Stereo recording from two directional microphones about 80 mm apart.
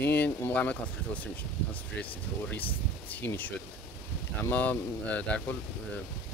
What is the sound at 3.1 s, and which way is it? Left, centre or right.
Speech, left.